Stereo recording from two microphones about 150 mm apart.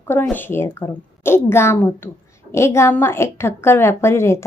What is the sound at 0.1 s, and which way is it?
Speech, 15° left (ahead or behind).